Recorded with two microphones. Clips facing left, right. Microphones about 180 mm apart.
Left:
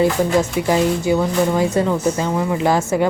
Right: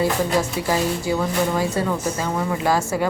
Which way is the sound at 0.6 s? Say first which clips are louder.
Left 5 dB; 20° left (ahead or behind).